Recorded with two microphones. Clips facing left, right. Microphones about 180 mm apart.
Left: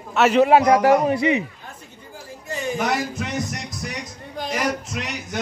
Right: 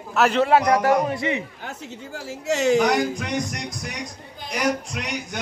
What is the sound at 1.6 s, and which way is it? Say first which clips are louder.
A woman's voice: right 6 dB; 85° right.